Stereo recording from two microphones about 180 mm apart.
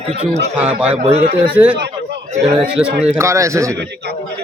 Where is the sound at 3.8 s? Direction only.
65° right (ahead or behind).